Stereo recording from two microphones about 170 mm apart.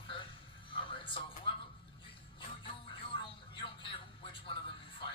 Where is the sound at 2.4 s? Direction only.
30° left (ahead or behind).